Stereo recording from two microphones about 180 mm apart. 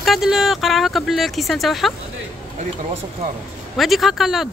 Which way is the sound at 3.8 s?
Centre (ahead or behind).